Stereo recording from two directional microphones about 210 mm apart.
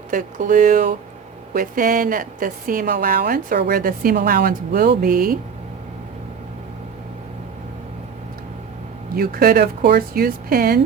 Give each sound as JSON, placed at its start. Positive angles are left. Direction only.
{"t": 0.1, "sound": "a woman's voice", "side_deg": -40}
{"t": 9.1, "sound": "a woman's voice", "side_deg": -45}